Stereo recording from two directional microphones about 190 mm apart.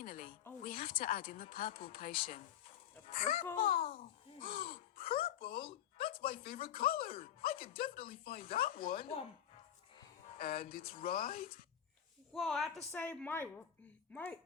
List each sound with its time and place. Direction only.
0.0 s a sound: 45° left (ahead or behind)
0.6 s a woman's voice: 45° left (ahead or behind)
4.4 s a sound: 50° left (ahead or behind)
6.3 s speech: 30° left (ahead or behind)
8.0 s speech: 50° left (ahead or behind)
10.3 s speech: 50° left (ahead or behind)
12.3 s a woman's voice: centre (ahead or behind)